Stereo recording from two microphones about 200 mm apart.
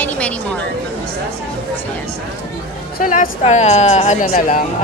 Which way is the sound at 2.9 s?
45° left (ahead or behind).